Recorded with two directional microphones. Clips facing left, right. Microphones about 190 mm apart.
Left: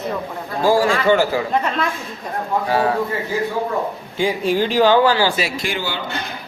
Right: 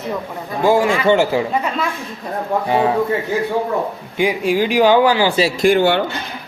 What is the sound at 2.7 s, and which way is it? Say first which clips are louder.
Speech: right 2 dB; 20° right (ahead or behind).